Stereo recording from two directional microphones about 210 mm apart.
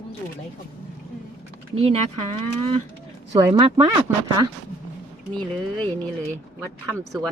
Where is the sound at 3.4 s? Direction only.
15° right (ahead or behind).